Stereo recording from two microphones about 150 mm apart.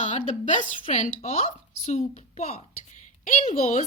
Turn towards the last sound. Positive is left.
turn(degrees=50)  # may be behind; listen again after turning